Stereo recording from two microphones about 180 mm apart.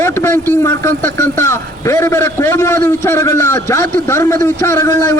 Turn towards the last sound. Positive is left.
turn(degrees=15)  # may be behind; listen again after turning